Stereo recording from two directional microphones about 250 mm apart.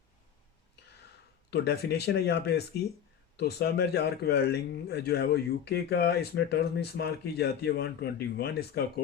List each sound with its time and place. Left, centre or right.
1.5 s a man's voice: left